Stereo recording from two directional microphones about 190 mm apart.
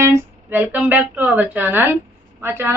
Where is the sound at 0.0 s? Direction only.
10° right (ahead or behind).